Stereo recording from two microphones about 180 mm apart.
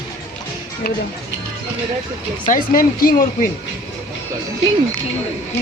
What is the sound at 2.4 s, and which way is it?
Speech, 50° left (ahead or behind).